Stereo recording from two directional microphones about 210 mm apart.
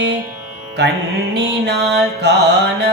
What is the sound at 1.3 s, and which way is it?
Mantra, 55° right (ahead or behind).